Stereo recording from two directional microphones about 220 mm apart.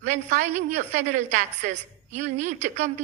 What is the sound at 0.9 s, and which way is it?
A woman's voice, 35° right (ahead or behind).